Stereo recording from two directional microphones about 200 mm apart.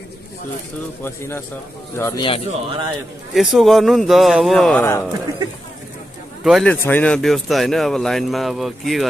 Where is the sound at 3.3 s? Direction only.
Centre (ahead or behind).